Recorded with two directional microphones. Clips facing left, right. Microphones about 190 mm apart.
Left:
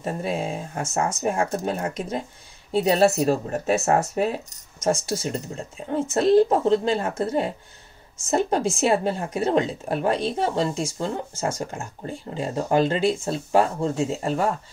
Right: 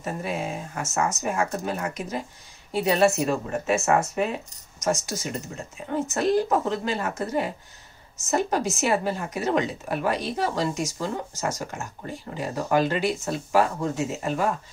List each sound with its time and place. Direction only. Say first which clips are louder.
0.0 s speech: left 3 dB; 30° left (ahead or behind)